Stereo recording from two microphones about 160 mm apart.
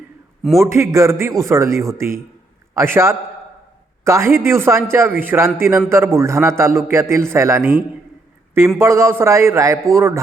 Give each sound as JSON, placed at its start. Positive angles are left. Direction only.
{"t": 0.6, "sound": "a man's voice", "side_deg": -20}